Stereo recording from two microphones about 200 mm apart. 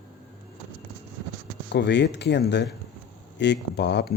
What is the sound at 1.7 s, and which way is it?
Speech, 60° left (ahead or behind).